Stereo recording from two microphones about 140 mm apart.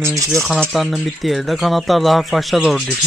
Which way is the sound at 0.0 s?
25° right (ahead or behind).